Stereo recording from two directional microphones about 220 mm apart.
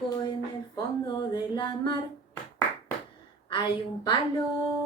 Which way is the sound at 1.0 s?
20° left (ahead or behind).